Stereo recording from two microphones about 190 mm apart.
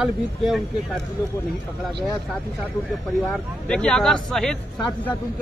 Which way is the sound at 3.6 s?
5° left (ahead or behind).